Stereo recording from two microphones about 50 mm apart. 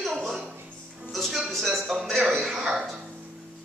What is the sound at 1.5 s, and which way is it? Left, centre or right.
Speech, centre.